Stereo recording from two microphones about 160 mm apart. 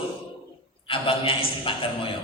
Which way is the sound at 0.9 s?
35° left (ahead or behind).